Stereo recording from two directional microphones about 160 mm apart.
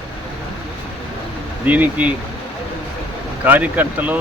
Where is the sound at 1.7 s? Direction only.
10° right (ahead or behind).